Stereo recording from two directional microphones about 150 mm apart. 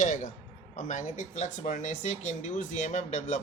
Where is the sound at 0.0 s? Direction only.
55° left (ahead or behind).